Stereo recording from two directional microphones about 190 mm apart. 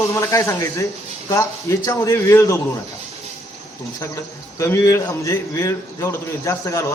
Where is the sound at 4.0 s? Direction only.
15° left (ahead or behind).